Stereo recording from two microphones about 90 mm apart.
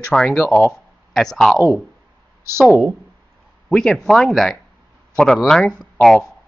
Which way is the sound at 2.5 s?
5° left (ahead or behind).